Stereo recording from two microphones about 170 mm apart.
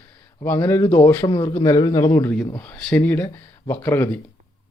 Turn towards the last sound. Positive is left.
turn(degrees=15)  # may be behind; listen again after turning